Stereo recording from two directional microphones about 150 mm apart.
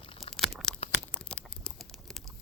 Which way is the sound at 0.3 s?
Centre (ahead or behind).